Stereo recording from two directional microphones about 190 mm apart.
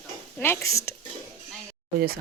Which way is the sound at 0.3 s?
10° left (ahead or behind).